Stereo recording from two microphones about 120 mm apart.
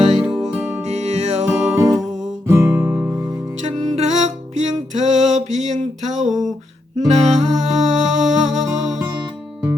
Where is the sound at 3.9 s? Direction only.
70° right (ahead or behind).